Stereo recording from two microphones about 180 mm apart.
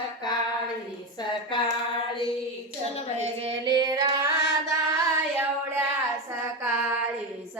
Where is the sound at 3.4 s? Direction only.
25° right (ahead or behind).